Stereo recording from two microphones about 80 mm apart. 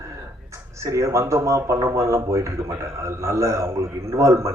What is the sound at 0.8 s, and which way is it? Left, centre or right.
Speech, right.